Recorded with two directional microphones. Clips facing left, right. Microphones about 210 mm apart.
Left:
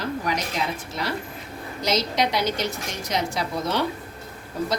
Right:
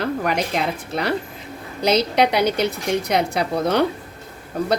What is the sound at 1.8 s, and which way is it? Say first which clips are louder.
A woman's voice: right 6 dB; 60° right (ahead or behind).